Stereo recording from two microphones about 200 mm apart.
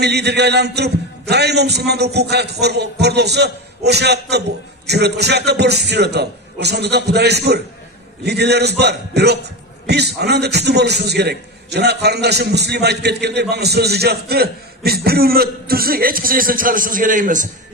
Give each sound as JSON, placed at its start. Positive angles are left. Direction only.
{"t": 0.0, "sound": "a man's voice", "side_deg": -55}